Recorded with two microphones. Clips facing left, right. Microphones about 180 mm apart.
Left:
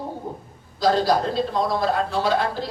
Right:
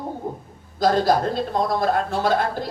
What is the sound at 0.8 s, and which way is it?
Speech, 50° right (ahead or behind).